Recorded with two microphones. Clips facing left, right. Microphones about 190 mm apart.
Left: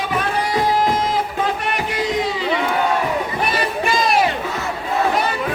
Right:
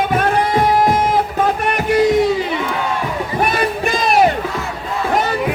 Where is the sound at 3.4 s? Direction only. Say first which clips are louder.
Right 3 dB; 45° right (ahead or behind).